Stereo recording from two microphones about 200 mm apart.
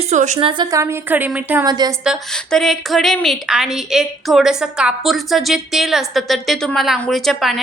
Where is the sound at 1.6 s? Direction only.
20° right (ahead or behind).